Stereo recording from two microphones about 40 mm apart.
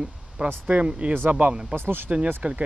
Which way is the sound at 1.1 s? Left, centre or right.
Right.